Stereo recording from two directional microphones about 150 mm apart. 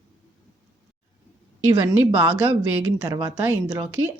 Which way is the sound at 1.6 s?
15° right (ahead or behind).